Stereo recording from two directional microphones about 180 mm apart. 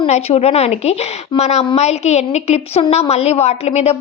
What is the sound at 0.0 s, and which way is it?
A woman's voice, 35° left (ahead or behind).